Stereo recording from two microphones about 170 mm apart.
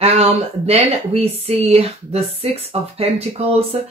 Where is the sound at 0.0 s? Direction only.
35° right (ahead or behind).